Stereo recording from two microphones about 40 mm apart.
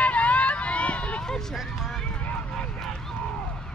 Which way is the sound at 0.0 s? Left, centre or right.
Left.